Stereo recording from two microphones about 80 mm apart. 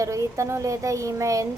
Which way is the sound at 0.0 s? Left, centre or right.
Right.